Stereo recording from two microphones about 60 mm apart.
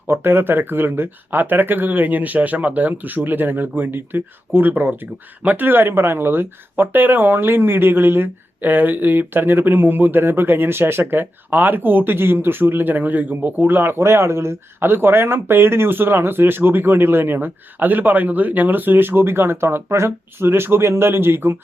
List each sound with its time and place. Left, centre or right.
0.1 s speech: right